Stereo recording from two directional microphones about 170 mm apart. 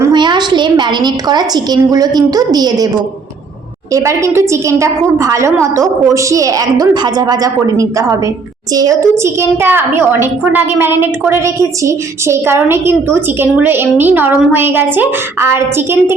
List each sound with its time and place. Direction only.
0.0 s a woman's voice: 25° right (ahead or behind)
3.9 s a child's voice: 15° right (ahead or behind)